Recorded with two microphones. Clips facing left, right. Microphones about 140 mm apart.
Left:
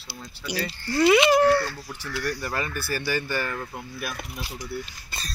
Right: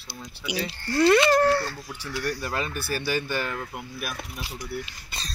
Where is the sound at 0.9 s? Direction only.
10° left (ahead or behind).